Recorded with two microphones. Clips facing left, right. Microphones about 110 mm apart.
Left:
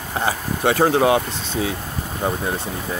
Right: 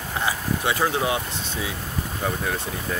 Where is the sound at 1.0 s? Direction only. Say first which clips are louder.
Left 8 dB; 60° left (ahead or behind).